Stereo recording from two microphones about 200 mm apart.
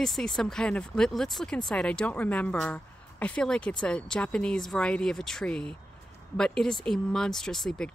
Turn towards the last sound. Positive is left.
turn(degrees=5)  # may be behind; listen again after turning